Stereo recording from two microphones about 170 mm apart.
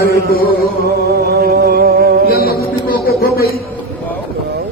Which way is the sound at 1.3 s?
65° right (ahead or behind).